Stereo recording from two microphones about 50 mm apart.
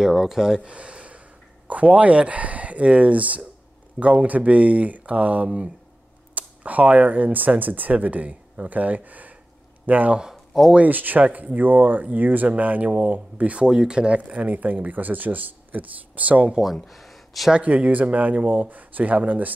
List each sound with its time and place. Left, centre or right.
0.0 s speech: centre
0.6 s a sound: right
1.7 s speech: right
10.3 s a sound: centre
10.9 s speech: right
13.7 s speech: centre; by 16.4 s right
16.6 s speech: centre
17.5 s speech: right